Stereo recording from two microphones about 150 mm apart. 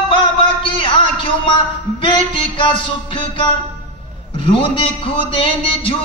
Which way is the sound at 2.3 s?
35° left (ahead or behind).